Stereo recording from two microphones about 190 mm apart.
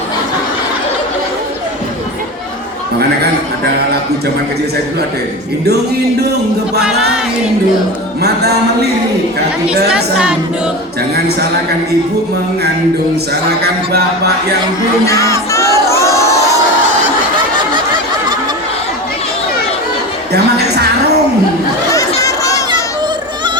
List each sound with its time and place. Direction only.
9.9 s a woman's voice: 5° right (ahead or behind)
13.6 s speech: 60° right (ahead or behind)
15.0 s crowd: 15° left (ahead or behind)
22.2 s chatter: 15° left (ahead or behind)